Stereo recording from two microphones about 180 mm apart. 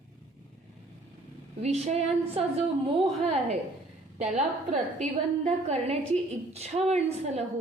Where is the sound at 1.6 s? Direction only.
35° right (ahead or behind).